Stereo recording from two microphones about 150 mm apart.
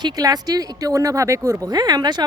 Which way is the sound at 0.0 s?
25° right (ahead or behind).